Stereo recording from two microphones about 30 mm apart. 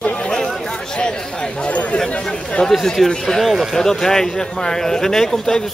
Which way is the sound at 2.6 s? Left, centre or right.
Left.